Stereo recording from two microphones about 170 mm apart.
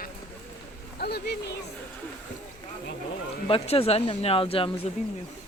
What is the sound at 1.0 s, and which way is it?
Speech, 70° left (ahead or behind).